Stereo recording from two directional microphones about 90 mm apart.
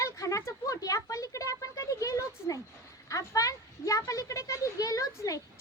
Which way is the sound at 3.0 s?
40° left (ahead or behind).